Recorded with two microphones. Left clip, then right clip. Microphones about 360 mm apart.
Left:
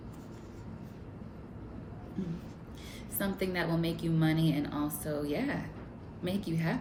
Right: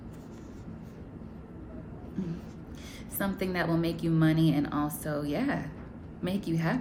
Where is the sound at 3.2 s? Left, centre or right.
Centre.